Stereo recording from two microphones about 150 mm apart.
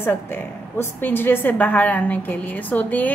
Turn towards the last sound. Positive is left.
turn(degrees=10)  # may be behind; listen again after turning